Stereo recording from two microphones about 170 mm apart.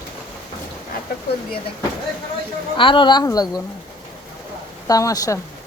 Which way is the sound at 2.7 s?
30° left (ahead or behind).